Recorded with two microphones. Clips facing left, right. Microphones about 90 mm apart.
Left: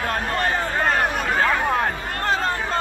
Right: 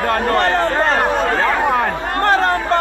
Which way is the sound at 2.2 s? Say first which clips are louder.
Right 8 dB; 65° right (ahead or behind).